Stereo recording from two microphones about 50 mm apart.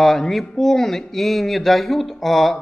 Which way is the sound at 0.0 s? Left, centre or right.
Centre.